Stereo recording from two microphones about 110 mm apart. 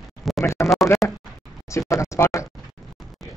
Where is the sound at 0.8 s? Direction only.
25° left (ahead or behind).